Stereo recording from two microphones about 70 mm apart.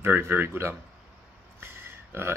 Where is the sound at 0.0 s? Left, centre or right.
Right.